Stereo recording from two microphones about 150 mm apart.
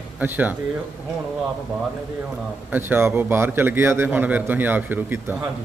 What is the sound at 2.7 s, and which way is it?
A man's voice, 15° right (ahead or behind).